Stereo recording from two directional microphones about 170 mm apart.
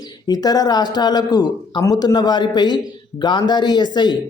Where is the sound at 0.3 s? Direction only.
25° left (ahead or behind).